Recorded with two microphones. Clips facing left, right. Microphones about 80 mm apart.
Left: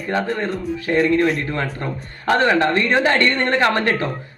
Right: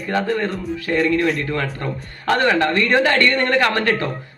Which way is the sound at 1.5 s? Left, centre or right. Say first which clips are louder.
Right 1 dB; left.